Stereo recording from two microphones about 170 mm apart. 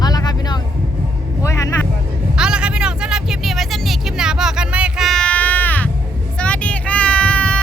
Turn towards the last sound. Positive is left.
turn(degrees=5)  # may be behind; listen again after turning